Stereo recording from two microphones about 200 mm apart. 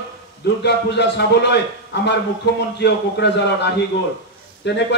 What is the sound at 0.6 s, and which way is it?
A man's voice, 60° left (ahead or behind).